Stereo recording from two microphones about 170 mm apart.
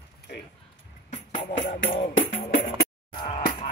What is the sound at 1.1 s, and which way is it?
Music, 30° left (ahead or behind).